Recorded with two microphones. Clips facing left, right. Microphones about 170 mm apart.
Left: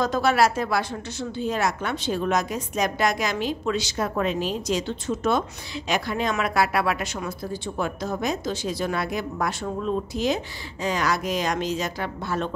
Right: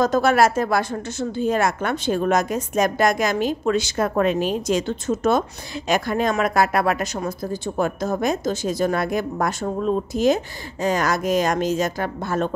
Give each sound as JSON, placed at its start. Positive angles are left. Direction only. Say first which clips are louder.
{"t": 0.0, "sound": "speech", "louder": "right 4 dB", "side_deg": -45}